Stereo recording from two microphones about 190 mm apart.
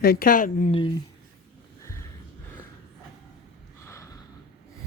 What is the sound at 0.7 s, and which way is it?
Speech, 25° left (ahead or behind).